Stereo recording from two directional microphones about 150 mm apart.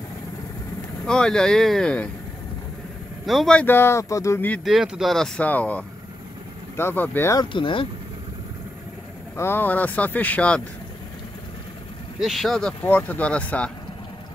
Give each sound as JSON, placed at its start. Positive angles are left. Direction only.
{"t": 1.0, "sound": "speech", "side_deg": 5}
{"t": 3.3, "sound": "speech", "side_deg": 0}
{"t": 4.6, "sound": "speech", "side_deg": -5}
{"t": 7.3, "sound": "speech", "side_deg": 35}
{"t": 9.4, "sound": "speech", "side_deg": 15}
{"t": 12.2, "sound": "speech", "side_deg": 0}